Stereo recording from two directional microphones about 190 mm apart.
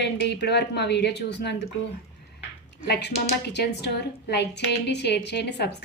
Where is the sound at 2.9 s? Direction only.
65° left (ahead or behind).